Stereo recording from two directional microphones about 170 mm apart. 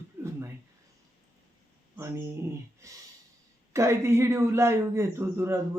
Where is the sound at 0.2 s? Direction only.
15° right (ahead or behind).